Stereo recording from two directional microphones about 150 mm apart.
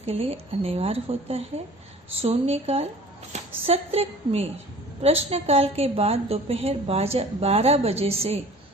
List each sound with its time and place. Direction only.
0.0 s a woman's voice: 40° right (ahead or behind)
3.3 s a sound: 50° right (ahead or behind)
3.7 s a woman's voice: 40° right (ahead or behind)